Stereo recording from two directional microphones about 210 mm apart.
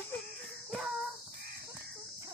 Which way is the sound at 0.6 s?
Centre (ahead or behind).